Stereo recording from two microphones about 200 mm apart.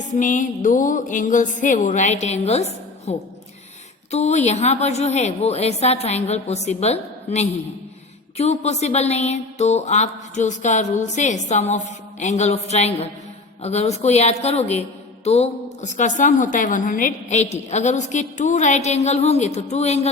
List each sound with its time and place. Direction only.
0.2 s a woman's voice: 40° left (ahead or behind)